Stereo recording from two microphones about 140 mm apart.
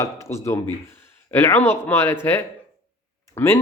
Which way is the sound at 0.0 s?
20° left (ahead or behind).